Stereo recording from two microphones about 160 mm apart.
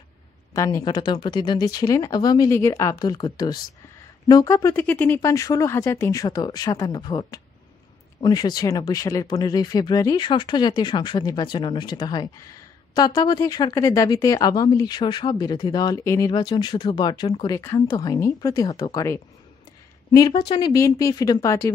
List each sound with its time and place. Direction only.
0.5 s speech: 20° left (ahead or behind)